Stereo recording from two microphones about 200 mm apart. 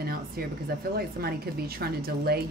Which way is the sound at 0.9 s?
50° right (ahead or behind).